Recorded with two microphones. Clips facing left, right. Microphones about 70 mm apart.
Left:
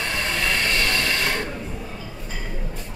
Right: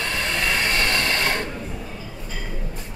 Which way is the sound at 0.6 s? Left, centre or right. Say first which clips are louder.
Right 1 dB; right.